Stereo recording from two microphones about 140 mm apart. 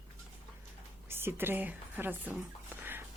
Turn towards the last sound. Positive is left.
turn(degrees=-15)  # may be behind; listen again after turning